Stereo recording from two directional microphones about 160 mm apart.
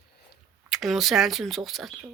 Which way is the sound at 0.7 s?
Centre (ahead or behind).